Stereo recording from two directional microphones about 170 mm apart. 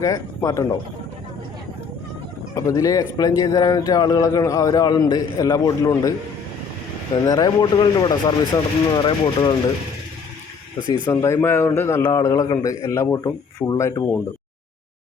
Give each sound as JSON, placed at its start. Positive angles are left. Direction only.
{"t": 0.0, "sound": "speech", "side_deg": 20}
{"t": 2.6, "sound": "speech", "side_deg": 20}
{"t": 7.3, "sound": "speech", "side_deg": 25}
{"t": 11.0, "sound": "a man's voice", "side_deg": 20}